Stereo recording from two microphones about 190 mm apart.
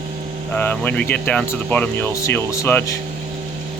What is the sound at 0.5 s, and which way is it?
Speech, 10° left (ahead or behind).